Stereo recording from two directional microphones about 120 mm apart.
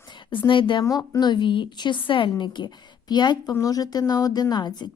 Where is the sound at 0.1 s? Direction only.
40° left (ahead or behind).